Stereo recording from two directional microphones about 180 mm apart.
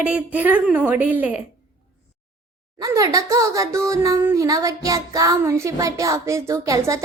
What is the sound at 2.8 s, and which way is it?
Child singing, 20° right (ahead or behind).